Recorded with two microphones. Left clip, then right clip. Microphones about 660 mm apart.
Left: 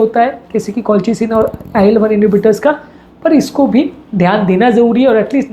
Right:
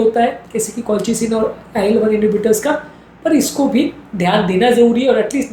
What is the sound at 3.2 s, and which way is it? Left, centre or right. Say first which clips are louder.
A woman's voice: left 4 dB; left.